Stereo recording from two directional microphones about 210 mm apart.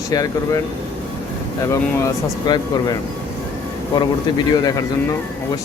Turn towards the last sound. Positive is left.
turn(degrees=20)  # may be behind; listen again after turning